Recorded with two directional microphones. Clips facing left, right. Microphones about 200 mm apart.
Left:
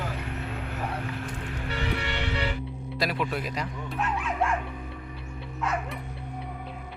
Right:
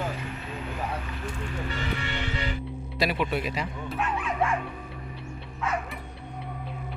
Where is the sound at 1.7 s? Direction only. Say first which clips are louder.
Left 4 dB; 70° left (ahead or behind).